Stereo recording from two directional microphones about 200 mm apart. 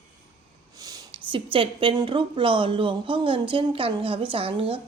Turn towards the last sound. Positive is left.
turn(degrees=-25)  # may be behind; listen again after turning